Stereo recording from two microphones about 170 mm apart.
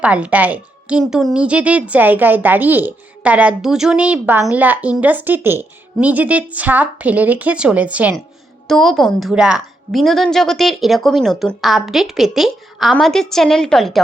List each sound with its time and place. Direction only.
0.0 s a woman's voice: 5° right (ahead or behind)